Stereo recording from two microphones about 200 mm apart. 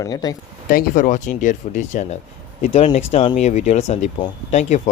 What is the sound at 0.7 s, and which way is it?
Speech, 45° left (ahead or behind).